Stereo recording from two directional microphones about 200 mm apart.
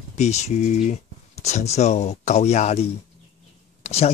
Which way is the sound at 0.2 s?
35° left (ahead or behind).